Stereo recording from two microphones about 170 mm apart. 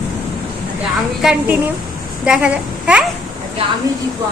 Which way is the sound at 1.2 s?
5° right (ahead or behind).